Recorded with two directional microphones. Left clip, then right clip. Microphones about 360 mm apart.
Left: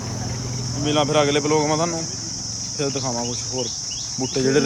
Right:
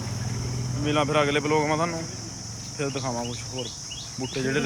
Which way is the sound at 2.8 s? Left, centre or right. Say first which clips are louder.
Left 4 dB; centre.